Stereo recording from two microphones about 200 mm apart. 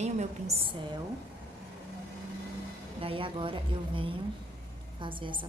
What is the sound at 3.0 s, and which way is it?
Speech, 25° right (ahead or behind).